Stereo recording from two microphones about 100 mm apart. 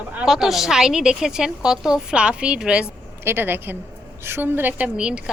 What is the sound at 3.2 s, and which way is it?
A woman's voice, 20° right (ahead or behind).